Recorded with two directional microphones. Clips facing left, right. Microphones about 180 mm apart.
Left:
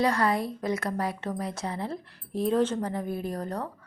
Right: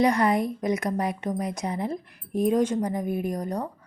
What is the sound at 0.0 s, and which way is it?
A woman's voice, 20° right (ahead or behind).